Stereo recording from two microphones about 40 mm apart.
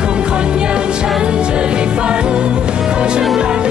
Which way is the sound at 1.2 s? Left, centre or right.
Right.